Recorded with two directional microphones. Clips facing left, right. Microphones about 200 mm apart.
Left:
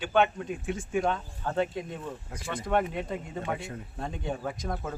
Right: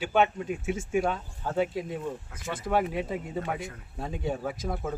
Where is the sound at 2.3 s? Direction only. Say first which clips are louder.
Left 6 dB; 30° left (ahead or behind).